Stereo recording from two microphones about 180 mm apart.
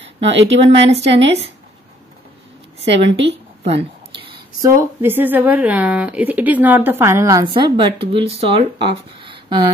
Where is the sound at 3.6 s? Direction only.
30° right (ahead or behind).